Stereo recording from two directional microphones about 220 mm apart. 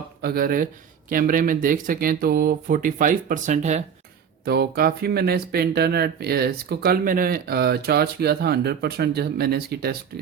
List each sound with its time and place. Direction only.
0.2 s speech: 45° right (ahead or behind)
4.4 s speech: 45° right (ahead or behind)